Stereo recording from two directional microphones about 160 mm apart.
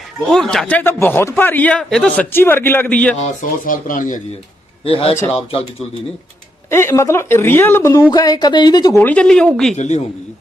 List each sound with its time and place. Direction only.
0.3 s a man's voice: 5° left (ahead or behind)
3.4 s speech: 55° left (ahead or behind)
4.9 s speech: 35° left (ahead or behind)
6.7 s a man's voice: 15° left (ahead or behind)
9.0 s a man's voice: 5° left (ahead or behind)
9.7 s a man's voice: 45° left (ahead or behind)